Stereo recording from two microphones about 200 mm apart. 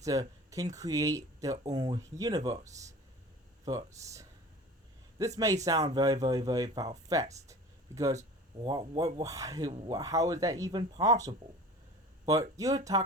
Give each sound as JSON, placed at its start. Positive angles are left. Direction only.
{"t": 0.0, "sound": "speech", "side_deg": -15}
{"t": 3.7, "sound": "speech", "side_deg": -15}
{"t": 5.6, "sound": "speech", "side_deg": -20}